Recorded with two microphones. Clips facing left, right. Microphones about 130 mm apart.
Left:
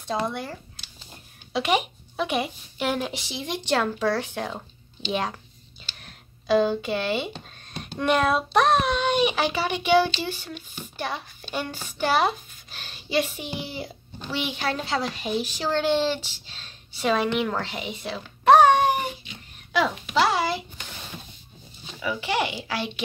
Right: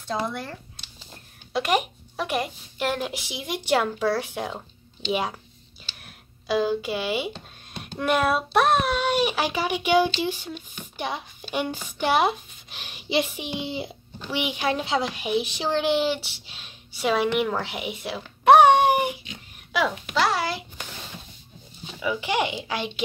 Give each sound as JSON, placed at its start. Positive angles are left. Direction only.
{"t": 1.5, "sound": "a woman's voice", "side_deg": 0}
{"t": 5.9, "sound": "a sound", "side_deg": -5}
{"t": 8.0, "sound": "a woman's voice", "side_deg": -5}
{"t": 22.0, "sound": "speech", "side_deg": -15}